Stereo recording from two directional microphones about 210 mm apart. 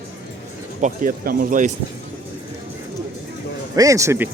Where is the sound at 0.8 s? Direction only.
40° right (ahead or behind).